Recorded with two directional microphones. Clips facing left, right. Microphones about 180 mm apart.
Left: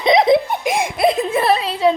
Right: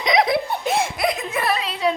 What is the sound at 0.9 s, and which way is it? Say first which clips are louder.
Music: left 7 dB; 25° left (ahead or behind).